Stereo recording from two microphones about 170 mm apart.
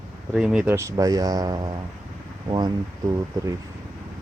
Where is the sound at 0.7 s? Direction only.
20° right (ahead or behind).